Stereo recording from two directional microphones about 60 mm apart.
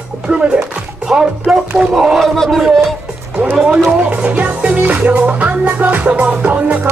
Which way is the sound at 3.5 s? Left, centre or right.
Centre.